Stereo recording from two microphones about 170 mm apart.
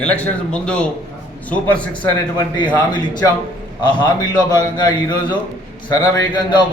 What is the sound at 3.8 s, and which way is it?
A man's voice, 25° left (ahead or behind).